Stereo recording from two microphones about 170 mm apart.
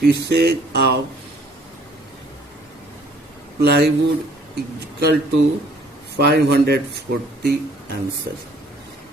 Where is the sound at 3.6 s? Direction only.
75° right (ahead or behind).